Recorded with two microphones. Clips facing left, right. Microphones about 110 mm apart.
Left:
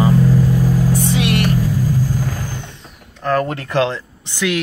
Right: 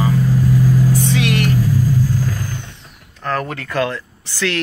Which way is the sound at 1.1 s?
20° left (ahead or behind).